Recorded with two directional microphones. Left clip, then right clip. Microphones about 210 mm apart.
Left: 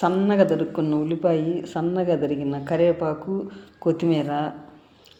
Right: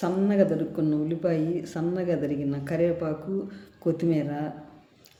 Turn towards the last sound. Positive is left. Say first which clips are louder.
# left 5 dB
turn(degrees=0)  # may be behind; listen again after turning